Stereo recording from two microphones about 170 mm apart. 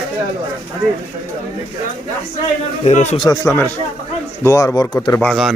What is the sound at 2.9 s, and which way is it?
Speech, 40° left (ahead or behind).